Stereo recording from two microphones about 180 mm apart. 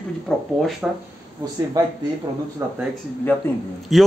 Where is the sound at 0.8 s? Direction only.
5° right (ahead or behind).